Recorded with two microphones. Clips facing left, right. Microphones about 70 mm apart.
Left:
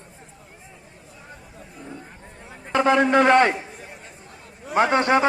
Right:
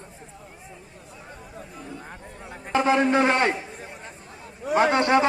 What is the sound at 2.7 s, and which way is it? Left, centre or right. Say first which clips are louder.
Speech: left 2 dB; left.